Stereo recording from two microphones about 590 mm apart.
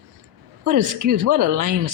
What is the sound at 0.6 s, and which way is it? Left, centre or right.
Speech, right.